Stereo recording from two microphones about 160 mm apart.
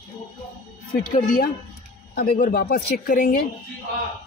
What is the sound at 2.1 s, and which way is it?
Speech, 90° left.